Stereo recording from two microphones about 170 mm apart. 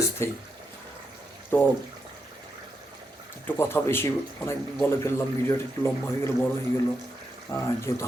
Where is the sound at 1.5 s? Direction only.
10° left (ahead or behind).